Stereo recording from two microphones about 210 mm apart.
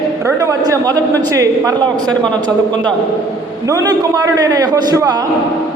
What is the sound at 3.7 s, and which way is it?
A man's voice, 15° right (ahead or behind).